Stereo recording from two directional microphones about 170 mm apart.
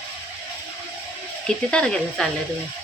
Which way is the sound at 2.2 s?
5° left (ahead or behind).